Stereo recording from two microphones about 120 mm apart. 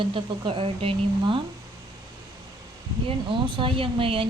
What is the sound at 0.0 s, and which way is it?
Speech, 45° right (ahead or behind).